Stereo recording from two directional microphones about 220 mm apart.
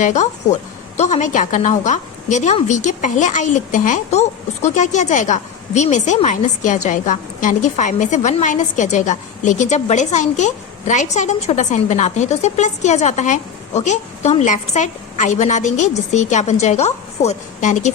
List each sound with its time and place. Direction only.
0.0 s a woman's voice: 30° left (ahead or behind)